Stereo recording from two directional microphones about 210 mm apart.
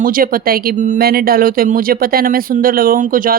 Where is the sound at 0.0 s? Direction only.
40° right (ahead or behind).